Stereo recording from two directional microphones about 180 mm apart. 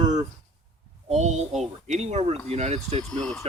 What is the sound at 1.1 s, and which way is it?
Speech, 40° right (ahead or behind).